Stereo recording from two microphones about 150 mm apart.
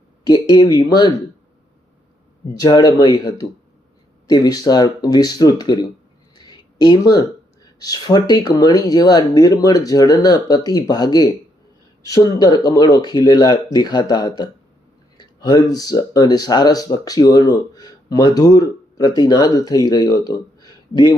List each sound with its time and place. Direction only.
0.3 s speech: 25° left (ahead or behind)
2.6 s speech: 25° left (ahead or behind)